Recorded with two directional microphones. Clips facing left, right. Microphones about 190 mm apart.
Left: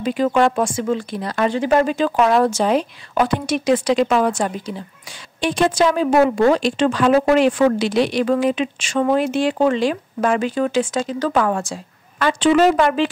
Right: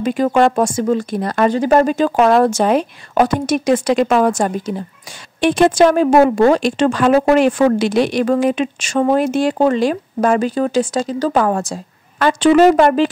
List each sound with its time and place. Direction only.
0.0 s a woman's voice: 45° right (ahead or behind)
5.4 s a woman's voice: 55° right (ahead or behind)